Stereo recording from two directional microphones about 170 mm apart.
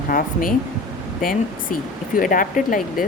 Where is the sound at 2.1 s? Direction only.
55° left (ahead or behind).